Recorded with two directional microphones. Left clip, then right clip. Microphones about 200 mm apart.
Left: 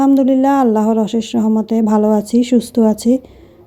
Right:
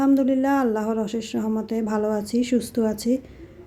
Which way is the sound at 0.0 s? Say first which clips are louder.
Left 8 dB; 30° left (ahead or behind).